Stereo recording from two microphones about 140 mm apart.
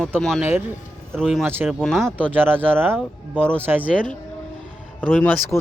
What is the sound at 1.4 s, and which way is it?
Speech, 15° right (ahead or behind).